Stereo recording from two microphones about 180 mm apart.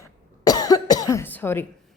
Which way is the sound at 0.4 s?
20° left (ahead or behind).